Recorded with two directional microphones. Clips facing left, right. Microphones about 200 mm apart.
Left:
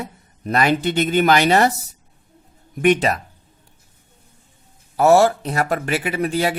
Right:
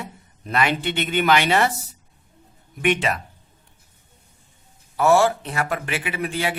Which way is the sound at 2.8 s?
40° left (ahead or behind).